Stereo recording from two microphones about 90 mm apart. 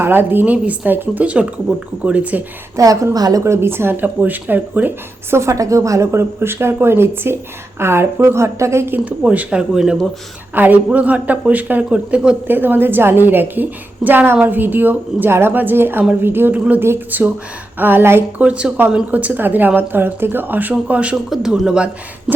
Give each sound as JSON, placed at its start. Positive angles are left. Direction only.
{"t": 0.0, "sound": "speech", "side_deg": -25}
{"t": 2.7, "sound": "speech", "side_deg": -40}
{"t": 9.0, "sound": "speech", "side_deg": -15}
{"t": 10.5, "sound": "speech", "side_deg": -20}
{"t": 18.3, "sound": "speech", "side_deg": -15}
{"t": 21.2, "sound": "speech", "side_deg": -5}